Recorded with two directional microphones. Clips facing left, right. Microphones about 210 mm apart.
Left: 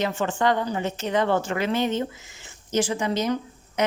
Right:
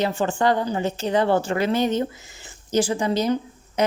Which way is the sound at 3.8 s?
35° right (ahead or behind).